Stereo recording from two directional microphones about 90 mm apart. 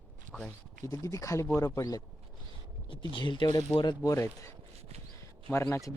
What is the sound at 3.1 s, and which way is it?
Speech, 65° left (ahead or behind).